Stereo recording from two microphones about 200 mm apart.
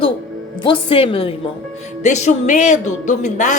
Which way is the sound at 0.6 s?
25° left (ahead or behind).